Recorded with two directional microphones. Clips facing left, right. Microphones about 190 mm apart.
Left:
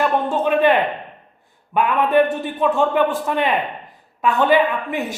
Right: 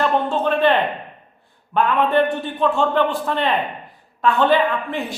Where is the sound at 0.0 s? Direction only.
10° left (ahead or behind).